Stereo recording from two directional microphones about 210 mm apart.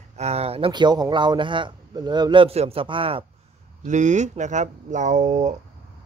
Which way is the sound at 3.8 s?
35° right (ahead or behind).